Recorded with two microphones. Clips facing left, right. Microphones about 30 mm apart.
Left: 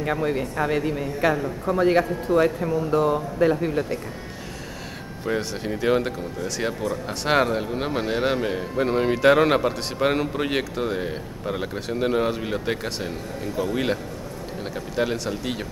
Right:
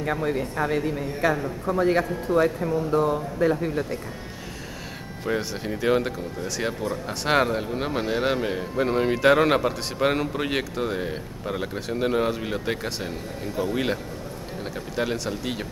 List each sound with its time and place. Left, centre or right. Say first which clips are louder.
0.0 s speech: left 1 dB; centre
1.3 s a man's voice: left 2 dB; centre
1.8 s speech: left 2 dB; centre
5.3 s a man's voice: left 1 dB; centre
15.0 s a man's voice: left 2 dB; centre